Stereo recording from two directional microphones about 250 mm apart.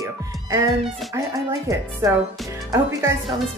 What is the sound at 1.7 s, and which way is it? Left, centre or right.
Speech, centre.